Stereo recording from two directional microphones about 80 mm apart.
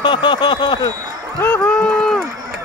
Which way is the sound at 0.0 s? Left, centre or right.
Left.